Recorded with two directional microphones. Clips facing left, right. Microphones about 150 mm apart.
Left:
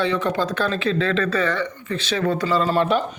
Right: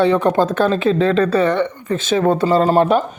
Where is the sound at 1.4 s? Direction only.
55° right (ahead or behind).